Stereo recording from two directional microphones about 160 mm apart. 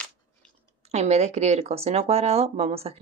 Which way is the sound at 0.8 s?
45° right (ahead or behind).